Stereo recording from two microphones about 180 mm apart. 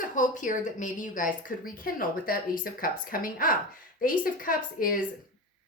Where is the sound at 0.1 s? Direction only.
45° left (ahead or behind).